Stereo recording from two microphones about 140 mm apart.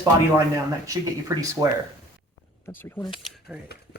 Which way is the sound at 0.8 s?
25° right (ahead or behind).